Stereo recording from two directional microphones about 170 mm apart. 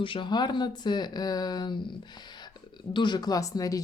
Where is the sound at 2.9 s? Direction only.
25° left (ahead or behind).